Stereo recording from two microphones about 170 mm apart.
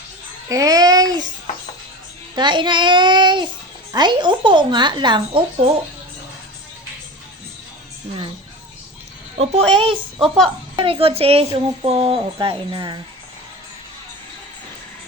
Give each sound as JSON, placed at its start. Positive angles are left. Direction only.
{"t": 0.4, "sound": "a child's voice", "side_deg": -20}
{"t": 2.3, "sound": "a woman's voice", "side_deg": -25}
{"t": 9.8, "sound": "speech", "side_deg": -35}
{"t": 10.2, "sound": "a woman's voice", "side_deg": 5}
{"t": 10.8, "sound": "speech", "side_deg": -35}